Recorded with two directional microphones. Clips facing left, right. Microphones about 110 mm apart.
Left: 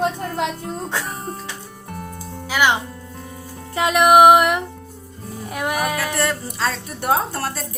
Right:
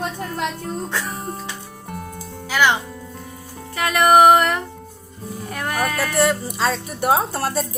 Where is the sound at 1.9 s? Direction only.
Centre (ahead or behind).